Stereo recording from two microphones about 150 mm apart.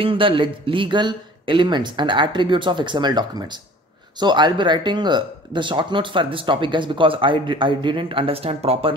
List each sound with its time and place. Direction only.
0.0 s speech: 35° right (ahead or behind)